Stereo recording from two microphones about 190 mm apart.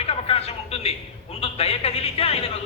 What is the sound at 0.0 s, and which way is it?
A man's voice, 30° left (ahead or behind).